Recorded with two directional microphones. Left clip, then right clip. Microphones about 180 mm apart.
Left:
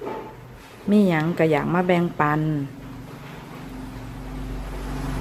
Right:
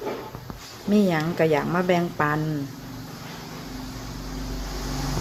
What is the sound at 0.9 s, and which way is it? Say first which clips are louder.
Speech: left 2 dB; 20° left (ahead or behind).